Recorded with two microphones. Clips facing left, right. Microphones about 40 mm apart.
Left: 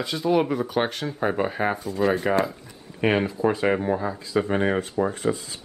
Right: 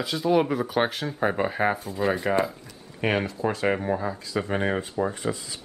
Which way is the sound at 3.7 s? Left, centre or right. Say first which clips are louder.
Left 2 dB; centre.